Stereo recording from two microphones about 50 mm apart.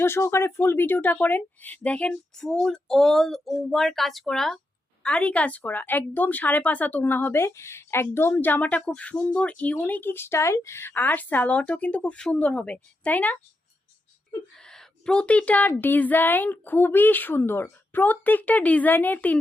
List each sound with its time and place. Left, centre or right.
0.0 s speech: left; by 2.4 s centre
2.4 s speech: centre
5.0 s speech: left
8.4 s speech: left
13.1 s speech: left
14.6 s speech: centre; by 19.4 s left